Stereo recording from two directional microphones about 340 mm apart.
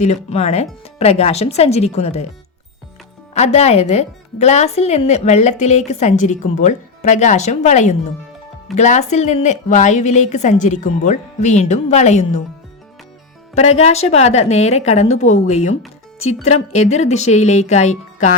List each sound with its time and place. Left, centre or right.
0.0 s speech: centre
3.3 s speech: centre
13.6 s speech: centre